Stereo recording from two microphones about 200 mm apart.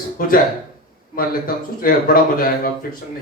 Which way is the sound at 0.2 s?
45° left (ahead or behind).